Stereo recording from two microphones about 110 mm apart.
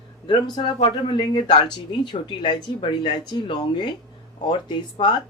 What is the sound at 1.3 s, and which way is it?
Speech, 40° left (ahead or behind).